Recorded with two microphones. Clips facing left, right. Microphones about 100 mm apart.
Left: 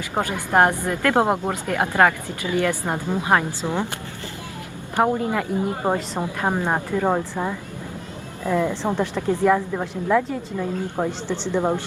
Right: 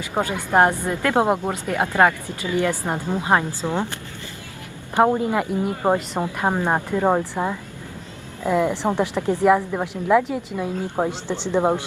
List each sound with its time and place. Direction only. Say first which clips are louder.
0.2 s a woman's voice: right 1 dB; 20° right (ahead or behind)
3.6 s speech: right 1 dB; 15° left (ahead or behind)
4.9 s a woman's voice: right 2 dB; 20° right (ahead or behind)